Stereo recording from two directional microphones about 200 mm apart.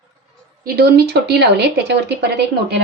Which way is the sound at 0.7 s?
50° right (ahead or behind).